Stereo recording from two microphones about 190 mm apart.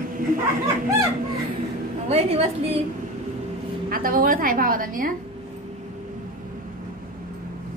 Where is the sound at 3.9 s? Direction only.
50° right (ahead or behind).